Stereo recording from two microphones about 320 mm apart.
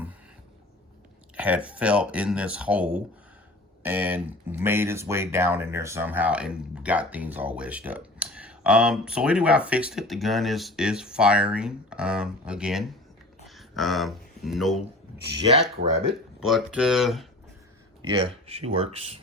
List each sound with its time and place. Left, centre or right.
1.4 s speech: centre
13.4 s a sound: centre
15.7 s speech: centre
16.5 s speech: centre
18.2 s speech: centre